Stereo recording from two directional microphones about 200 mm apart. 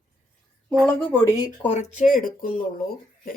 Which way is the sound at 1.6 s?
35° left (ahead or behind).